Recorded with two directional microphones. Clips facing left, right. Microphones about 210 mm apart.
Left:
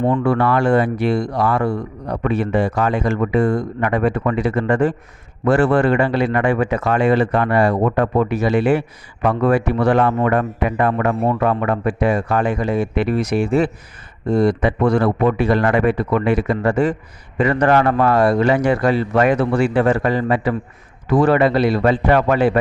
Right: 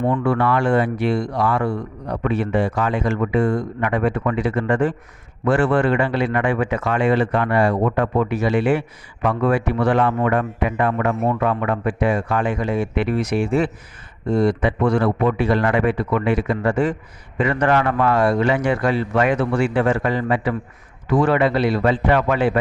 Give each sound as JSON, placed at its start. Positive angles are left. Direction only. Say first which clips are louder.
{"t": 0.0, "sound": "speech", "louder": "left 2 dB", "side_deg": 35}